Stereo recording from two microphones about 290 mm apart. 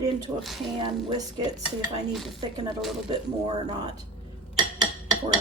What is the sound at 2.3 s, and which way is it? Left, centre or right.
Speech, centre.